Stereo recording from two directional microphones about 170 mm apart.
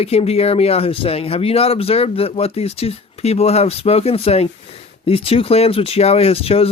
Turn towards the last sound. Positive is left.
turn(degrees=35)  # may be behind; listen again after turning